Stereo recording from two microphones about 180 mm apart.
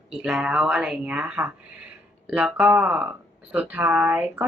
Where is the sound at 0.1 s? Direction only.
5° right (ahead or behind).